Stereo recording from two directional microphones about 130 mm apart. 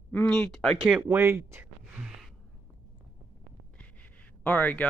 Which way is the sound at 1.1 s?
15° right (ahead or behind).